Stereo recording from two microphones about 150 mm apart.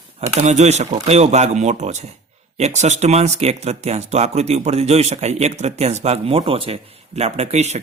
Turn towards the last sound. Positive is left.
turn(degrees=-45)  # may be behind; listen again after turning